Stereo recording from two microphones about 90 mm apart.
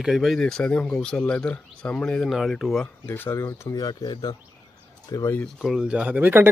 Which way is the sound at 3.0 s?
25° left (ahead or behind).